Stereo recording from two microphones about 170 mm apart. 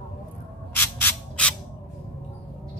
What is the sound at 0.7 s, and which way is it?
Owl, 10° left (ahead or behind).